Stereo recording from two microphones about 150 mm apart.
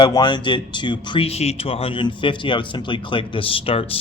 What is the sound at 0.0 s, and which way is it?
Speech, 30° left (ahead or behind).